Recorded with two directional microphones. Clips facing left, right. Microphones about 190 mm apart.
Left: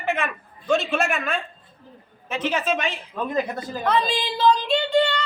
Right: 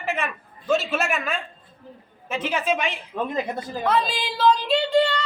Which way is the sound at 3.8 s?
Centre (ahead or behind).